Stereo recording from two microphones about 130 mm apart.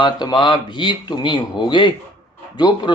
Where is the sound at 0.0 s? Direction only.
35° left (ahead or behind).